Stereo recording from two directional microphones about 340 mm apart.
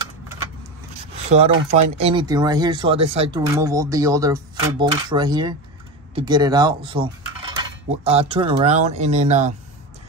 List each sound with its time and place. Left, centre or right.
1.3 s speech: right